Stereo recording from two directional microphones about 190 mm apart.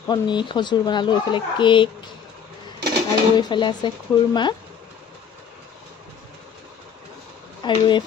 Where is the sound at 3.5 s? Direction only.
25° left (ahead or behind).